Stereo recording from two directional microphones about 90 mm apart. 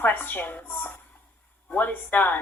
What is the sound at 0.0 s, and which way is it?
Speech, 20° left (ahead or behind).